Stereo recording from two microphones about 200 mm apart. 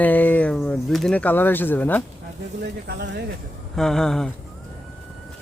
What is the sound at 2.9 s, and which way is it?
Speech, 55° right (ahead or behind).